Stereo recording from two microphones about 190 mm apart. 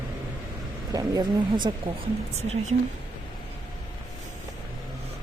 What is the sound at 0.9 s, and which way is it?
Speech, 20° right (ahead or behind).